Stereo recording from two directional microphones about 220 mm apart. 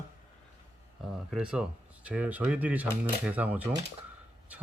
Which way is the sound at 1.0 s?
Centre (ahead or behind).